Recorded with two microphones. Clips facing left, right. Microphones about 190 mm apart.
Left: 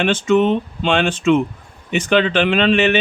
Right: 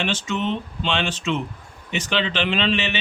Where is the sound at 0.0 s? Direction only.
55° left (ahead or behind).